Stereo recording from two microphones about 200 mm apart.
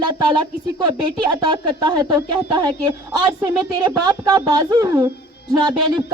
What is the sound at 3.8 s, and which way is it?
A woman's voice, 20° right (ahead or behind).